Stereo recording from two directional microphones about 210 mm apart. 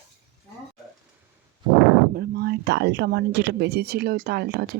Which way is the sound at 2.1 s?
45° right (ahead or behind).